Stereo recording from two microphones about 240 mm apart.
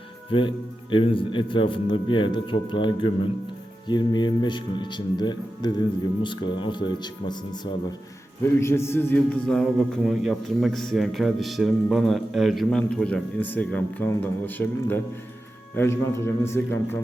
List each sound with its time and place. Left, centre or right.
0.3 s a man's voice: left